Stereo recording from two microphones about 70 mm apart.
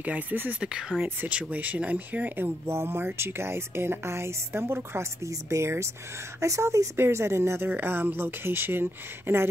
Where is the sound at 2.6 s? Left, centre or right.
Right.